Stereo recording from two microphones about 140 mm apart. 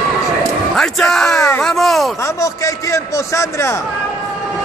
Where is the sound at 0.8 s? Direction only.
5° left (ahead or behind).